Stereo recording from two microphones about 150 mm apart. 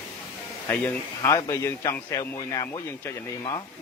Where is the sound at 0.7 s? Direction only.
15° left (ahead or behind).